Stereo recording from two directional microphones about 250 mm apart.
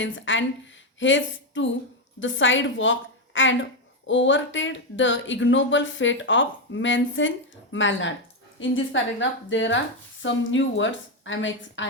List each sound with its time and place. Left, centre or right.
0.0 s a woman's voice: left